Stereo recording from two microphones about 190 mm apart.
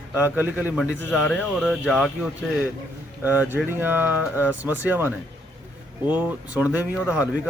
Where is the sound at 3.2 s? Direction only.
10° right (ahead or behind).